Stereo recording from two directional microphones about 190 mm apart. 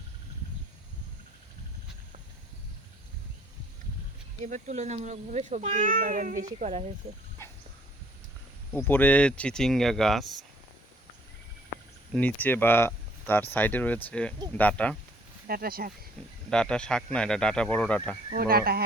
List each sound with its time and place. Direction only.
4.4 s speech: 40° right (ahead or behind)
8.7 s speech: 10° left (ahead or behind)
12.1 s speech: 10° left (ahead or behind)
15.4 s speech: 50° right (ahead or behind)
16.5 s speech: 5° left (ahead or behind)
18.3 s speech: 55° right (ahead or behind)